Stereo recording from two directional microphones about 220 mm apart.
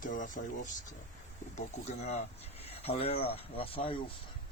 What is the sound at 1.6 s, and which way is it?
Speech, 30° left (ahead or behind).